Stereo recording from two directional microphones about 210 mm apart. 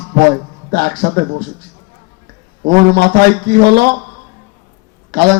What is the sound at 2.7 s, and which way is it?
A man's voice, 45° right (ahead or behind).